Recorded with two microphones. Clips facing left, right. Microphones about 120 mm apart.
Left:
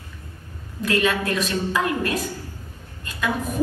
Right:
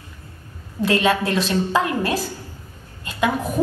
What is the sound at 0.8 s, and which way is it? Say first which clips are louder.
A woman's voice: right 3 dB; 30° right (ahead or behind).